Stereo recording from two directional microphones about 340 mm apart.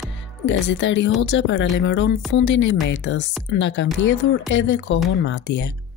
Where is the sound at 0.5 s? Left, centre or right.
Left.